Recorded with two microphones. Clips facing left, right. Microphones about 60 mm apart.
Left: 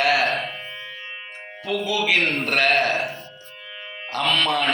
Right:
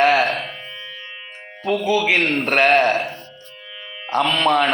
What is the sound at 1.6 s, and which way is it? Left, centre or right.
Speech, right.